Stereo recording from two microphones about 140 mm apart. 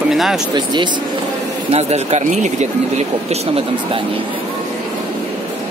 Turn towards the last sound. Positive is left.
turn(degrees=-45)  # may be behind; listen again after turning